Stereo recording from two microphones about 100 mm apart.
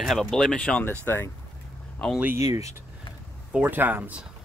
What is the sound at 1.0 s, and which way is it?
Speech, 20° left (ahead or behind).